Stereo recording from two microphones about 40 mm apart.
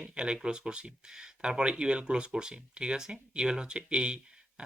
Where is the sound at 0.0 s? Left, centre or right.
Right.